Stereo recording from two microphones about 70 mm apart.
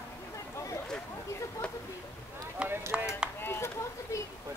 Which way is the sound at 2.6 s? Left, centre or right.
Centre.